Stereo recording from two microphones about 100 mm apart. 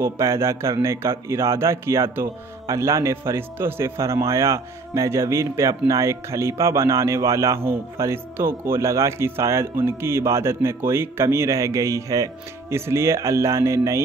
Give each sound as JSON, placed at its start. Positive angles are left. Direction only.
{"t": 0.0, "sound": "speech", "side_deg": -30}